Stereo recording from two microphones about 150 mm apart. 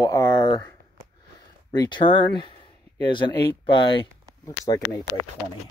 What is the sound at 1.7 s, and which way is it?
Speech, 30° left (ahead or behind).